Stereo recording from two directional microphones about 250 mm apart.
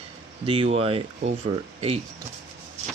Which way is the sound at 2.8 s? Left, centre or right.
Right.